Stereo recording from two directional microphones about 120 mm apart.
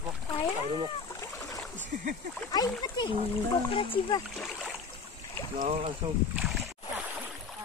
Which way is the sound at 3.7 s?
45° left (ahead or behind).